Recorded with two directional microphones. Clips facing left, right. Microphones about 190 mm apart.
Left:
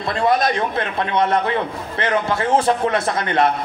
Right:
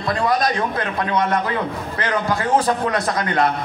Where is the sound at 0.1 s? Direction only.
25° left (ahead or behind).